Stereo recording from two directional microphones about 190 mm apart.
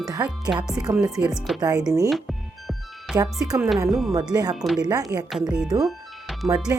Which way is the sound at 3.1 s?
20° right (ahead or behind).